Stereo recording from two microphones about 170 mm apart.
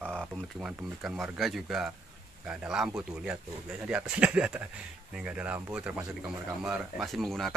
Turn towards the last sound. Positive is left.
turn(degrees=0)  # may be behind; listen again after turning